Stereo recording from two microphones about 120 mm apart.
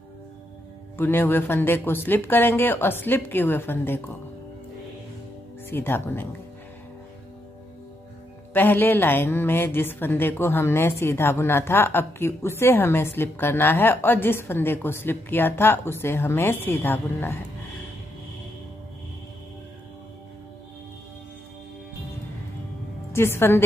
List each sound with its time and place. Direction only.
0.9 s speech: 15° left (ahead or behind)
5.7 s speech: 20° left (ahead or behind)
8.5 s a woman's voice: 15° left (ahead or behind)
23.1 s a woman's voice: 20° left (ahead or behind)